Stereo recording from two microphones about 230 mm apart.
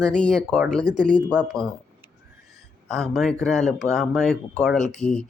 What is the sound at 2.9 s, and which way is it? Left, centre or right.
Speech, centre.